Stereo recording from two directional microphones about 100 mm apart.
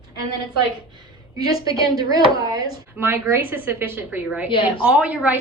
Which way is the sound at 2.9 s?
25° right (ahead or behind).